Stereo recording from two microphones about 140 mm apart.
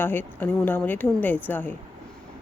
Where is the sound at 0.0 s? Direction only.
15° left (ahead or behind).